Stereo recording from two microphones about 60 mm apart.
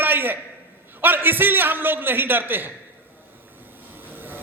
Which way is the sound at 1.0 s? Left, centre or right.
Right.